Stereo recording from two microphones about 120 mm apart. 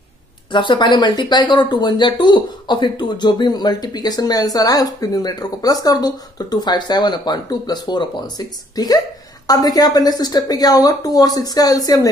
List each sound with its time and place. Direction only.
0.5 s speech: 40° left (ahead or behind)